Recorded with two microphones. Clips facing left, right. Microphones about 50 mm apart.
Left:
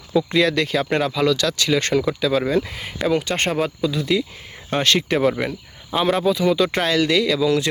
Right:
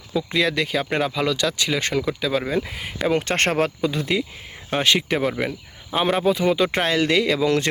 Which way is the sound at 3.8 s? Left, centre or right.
Right.